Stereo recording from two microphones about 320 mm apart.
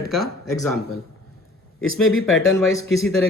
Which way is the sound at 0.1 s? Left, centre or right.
Centre.